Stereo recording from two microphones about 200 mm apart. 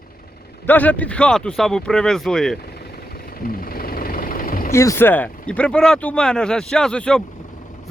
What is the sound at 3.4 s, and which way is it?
Vehicle, 45° left (ahead or behind).